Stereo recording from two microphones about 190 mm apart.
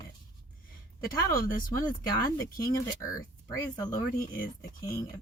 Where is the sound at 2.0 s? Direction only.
20° left (ahead or behind).